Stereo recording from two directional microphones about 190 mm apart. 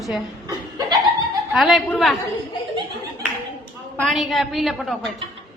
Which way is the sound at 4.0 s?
Centre (ahead or behind).